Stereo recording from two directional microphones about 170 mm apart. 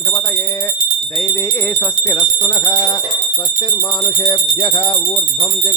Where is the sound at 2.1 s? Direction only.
25° left (ahead or behind).